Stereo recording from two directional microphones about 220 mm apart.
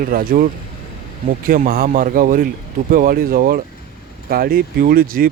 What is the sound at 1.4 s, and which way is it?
Speech, 40° right (ahead or behind).